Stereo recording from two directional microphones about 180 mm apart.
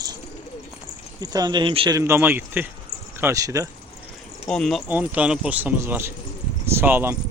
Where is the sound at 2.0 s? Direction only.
10° right (ahead or behind).